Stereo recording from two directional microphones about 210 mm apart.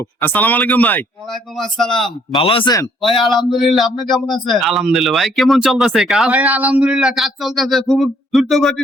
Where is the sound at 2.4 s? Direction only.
25° left (ahead or behind).